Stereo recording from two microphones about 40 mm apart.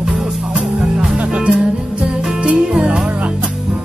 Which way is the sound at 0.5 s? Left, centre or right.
Right.